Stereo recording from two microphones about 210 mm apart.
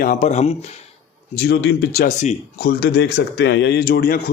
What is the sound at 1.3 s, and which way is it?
Speech, 50° left (ahead or behind).